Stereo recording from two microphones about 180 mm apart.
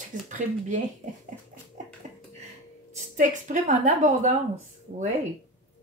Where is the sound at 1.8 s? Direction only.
45° right (ahead or behind).